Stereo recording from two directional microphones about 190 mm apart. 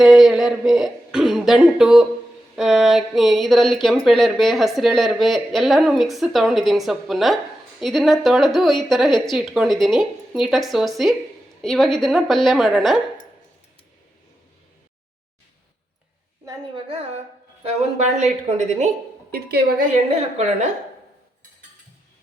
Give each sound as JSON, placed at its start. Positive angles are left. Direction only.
{"t": 0.0, "sound": "speech", "side_deg": 0}
{"t": 16.5, "sound": "a woman's voice", "side_deg": -25}
{"t": 19.3, "sound": "a woman's voice", "side_deg": -55}